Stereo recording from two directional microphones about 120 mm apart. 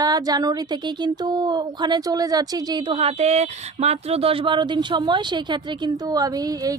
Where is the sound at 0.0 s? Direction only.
35° right (ahead or behind).